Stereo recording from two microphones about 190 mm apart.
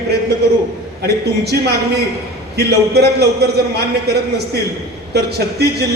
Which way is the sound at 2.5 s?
60° right (ahead or behind).